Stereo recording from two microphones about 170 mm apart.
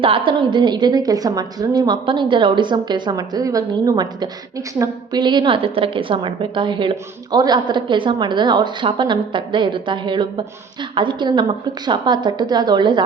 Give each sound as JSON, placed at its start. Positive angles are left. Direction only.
{"t": 0.0, "sound": "a woman's voice", "side_deg": -30}